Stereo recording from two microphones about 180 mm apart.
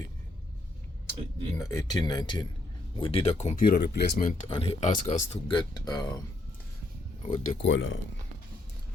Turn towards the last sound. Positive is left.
turn(degrees=90)